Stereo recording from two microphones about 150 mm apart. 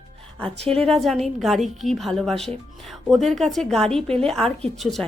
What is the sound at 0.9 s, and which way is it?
A woman's voice, centre (ahead or behind).